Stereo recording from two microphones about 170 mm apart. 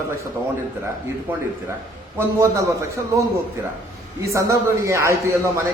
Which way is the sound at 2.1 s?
15° right (ahead or behind).